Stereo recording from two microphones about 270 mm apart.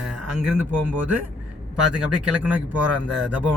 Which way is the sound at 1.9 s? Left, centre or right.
Centre.